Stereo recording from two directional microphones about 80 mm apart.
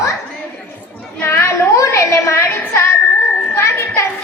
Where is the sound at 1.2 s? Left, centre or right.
Left.